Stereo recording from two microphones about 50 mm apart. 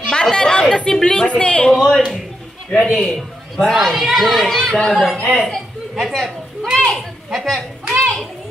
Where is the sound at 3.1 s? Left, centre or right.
Centre.